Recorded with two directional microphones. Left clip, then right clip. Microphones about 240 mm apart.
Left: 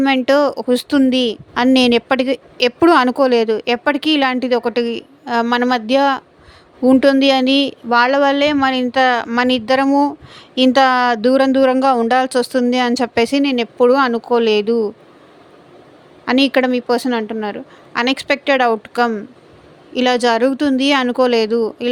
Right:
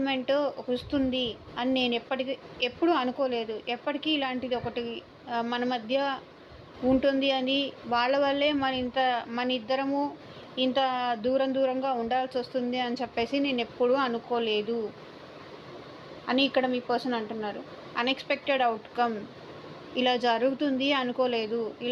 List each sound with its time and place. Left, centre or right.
0.0 s a woman's voice: left
16.2 s a woman's voice: left